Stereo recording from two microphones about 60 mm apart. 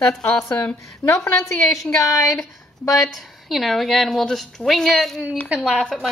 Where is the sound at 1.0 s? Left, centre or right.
Left.